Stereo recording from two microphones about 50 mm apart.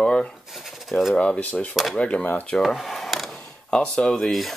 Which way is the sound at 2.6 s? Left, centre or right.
Centre.